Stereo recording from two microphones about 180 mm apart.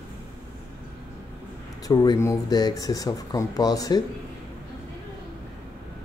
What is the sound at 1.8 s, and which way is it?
Speech, 25° left (ahead or behind).